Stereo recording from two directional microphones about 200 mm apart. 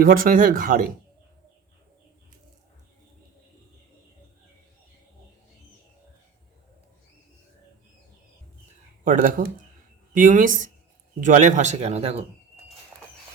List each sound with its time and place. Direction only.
0.0 s speech: 45° right (ahead or behind)
9.0 s a man's voice: 45° right (ahead or behind)